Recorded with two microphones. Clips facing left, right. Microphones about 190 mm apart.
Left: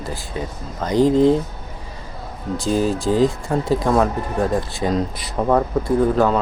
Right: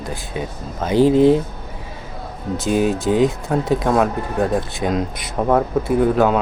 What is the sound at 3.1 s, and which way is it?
Speech, centre (ahead or behind).